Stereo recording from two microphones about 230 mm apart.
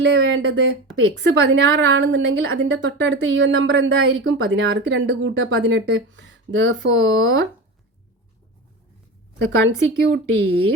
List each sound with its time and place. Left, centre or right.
0.1 s a woman's voice: right
9.4 s a woman's voice: right